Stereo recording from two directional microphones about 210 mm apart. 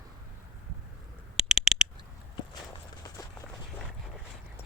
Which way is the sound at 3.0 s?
20° left (ahead or behind).